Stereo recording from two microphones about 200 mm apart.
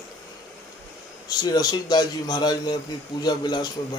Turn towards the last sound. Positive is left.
turn(degrees=20)  # may be behind; listen again after turning